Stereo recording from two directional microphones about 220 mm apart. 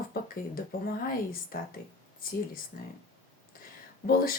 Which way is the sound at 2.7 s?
40° left (ahead or behind).